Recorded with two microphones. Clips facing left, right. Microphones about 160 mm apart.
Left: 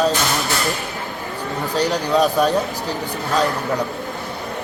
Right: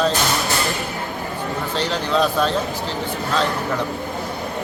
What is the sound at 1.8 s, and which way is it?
A man's voice, 15° left (ahead or behind).